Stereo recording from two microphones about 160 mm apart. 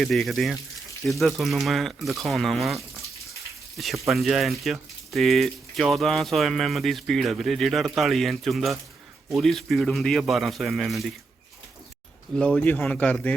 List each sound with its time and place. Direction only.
0.0 s speech: centre (ahead or behind)
4.0 s speech: centre (ahead or behind)
12.4 s speech: 5° left (ahead or behind)